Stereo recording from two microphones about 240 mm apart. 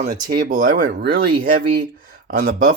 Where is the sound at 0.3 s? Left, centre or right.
Right.